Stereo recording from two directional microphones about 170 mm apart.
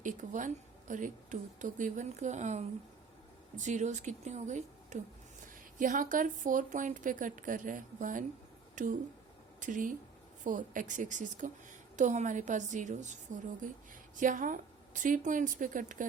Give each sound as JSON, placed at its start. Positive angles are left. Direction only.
{"t": 0.0, "sound": "a woman's voice", "side_deg": -50}
{"t": 8.7, "sound": "a sound", "side_deg": -50}
{"t": 9.6, "sound": "a woman's voice", "side_deg": -50}